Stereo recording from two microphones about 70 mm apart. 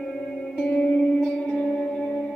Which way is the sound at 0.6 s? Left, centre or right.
Centre.